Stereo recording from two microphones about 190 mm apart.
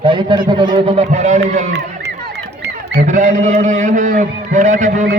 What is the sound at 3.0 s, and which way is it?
A man's voice, 40° right (ahead or behind).